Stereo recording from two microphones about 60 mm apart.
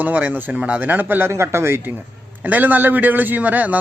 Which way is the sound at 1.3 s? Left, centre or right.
Right.